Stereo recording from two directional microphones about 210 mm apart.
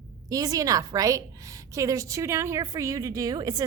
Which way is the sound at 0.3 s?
15° right (ahead or behind).